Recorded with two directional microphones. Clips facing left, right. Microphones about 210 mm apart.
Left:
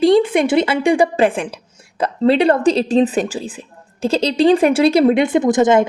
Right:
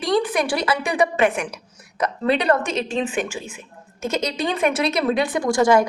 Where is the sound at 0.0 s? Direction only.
25° left (ahead or behind).